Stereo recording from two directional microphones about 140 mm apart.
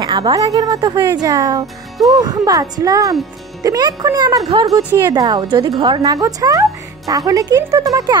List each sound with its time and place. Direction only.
0.0 s a woman's voice: 30° right (ahead or behind)
4.8 s a woman's voice: 20° right (ahead or behind)